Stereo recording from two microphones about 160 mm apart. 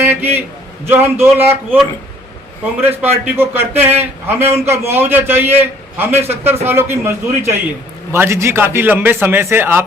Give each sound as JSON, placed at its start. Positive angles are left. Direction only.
{"t": 0.0, "sound": "a sound", "side_deg": -10}
{"t": 0.9, "sound": "a man's voice", "side_deg": -15}
{"t": 2.8, "sound": "a man's voice", "side_deg": -10}